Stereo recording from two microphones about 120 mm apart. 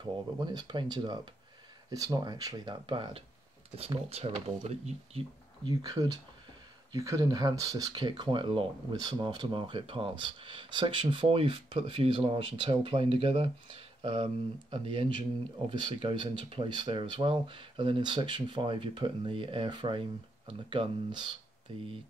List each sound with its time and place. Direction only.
0.0 s speech: 35° right (ahead or behind); by 5.2 s 60° right (ahead or behind)
5.7 s speech: 30° right (ahead or behind)